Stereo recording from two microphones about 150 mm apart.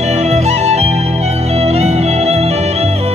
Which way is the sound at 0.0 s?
50° right (ahead or behind).